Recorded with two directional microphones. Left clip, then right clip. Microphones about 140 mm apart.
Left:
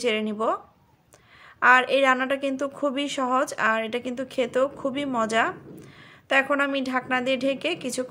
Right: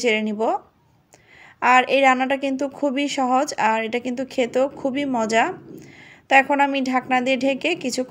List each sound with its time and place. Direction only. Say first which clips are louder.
0.0 s a woman's voice: right 4 dB; 20° right (ahead or behind)
1.6 s a woman's voice: right 2 dB; 20° right (ahead or behind)